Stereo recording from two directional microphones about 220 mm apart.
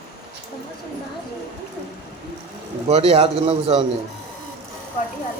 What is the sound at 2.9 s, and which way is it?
Speech, 25° right (ahead or behind).